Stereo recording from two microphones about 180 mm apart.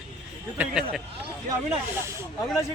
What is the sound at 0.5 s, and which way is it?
Speech, 5° right (ahead or behind).